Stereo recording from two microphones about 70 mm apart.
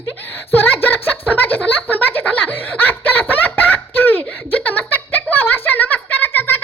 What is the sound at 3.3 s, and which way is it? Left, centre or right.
Giggle, left.